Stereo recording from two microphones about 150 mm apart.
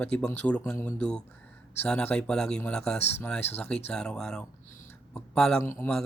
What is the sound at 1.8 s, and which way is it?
Speech, 10° left (ahead or behind).